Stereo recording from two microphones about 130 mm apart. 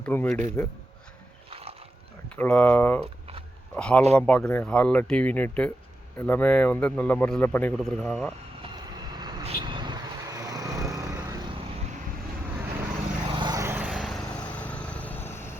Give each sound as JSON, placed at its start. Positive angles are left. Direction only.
{"t": 0.0, "sound": "speech", "side_deg": 15}
{"t": 1.5, "sound": "a sound", "side_deg": -50}
{"t": 2.3, "sound": "speech", "side_deg": 10}
{"t": 7.8, "sound": "speech", "side_deg": 5}
{"t": 8.7, "sound": "vehicle", "side_deg": -35}
{"t": 9.4, "sound": "vehicle", "side_deg": -45}
{"t": 13.2, "sound": "vehicle", "side_deg": -35}
{"t": 13.6, "sound": "vehicle", "side_deg": -15}
{"t": 14.4, "sound": "vehicle", "side_deg": 10}